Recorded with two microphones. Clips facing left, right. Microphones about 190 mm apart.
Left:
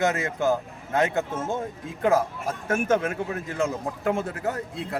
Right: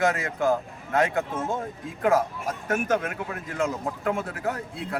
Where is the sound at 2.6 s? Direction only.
30° left (ahead or behind).